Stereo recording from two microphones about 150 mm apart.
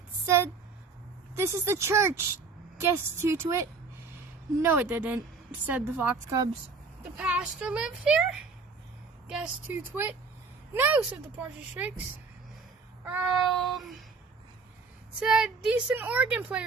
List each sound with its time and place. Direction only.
0.3 s a sound: 15° right (ahead or behind)
1.4 s speech: 20° right (ahead or behind)
7.2 s speech: 5° right (ahead or behind)
13.1 s speech: 5° right (ahead or behind)
15.2 s speech: 5° right (ahead or behind)